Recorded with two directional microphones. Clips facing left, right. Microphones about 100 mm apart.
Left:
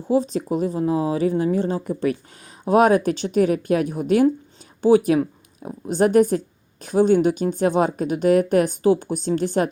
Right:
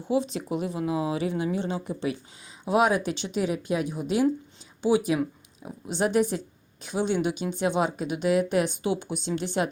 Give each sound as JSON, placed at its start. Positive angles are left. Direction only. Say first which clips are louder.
{"t": 0.1, "sound": "speech", "louder": "left 6 dB", "side_deg": 40}